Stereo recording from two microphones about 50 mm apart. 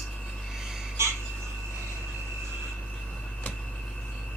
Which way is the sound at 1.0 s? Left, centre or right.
Right.